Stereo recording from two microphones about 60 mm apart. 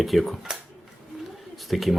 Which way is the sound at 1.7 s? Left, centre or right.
Centre.